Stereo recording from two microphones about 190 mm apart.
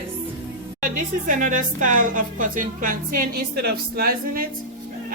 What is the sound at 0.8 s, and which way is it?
Speech, 45° right (ahead or behind).